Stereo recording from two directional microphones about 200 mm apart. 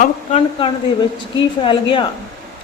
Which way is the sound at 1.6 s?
25° left (ahead or behind).